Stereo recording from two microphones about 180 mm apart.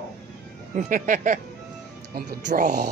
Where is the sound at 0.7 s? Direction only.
45° right (ahead or behind).